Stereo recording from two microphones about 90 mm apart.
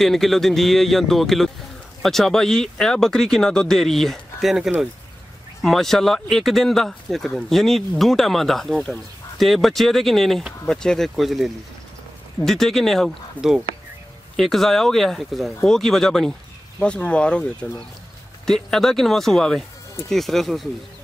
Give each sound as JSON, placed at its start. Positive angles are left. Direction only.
{"t": 0.0, "sound": "speech", "side_deg": 5}
{"t": 13.4, "sound": "speech", "side_deg": 15}
{"t": 14.3, "sound": "speech", "side_deg": 5}